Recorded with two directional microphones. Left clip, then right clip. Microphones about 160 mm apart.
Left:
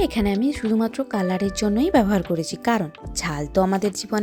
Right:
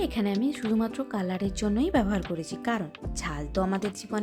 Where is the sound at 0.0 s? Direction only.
30° left (ahead or behind).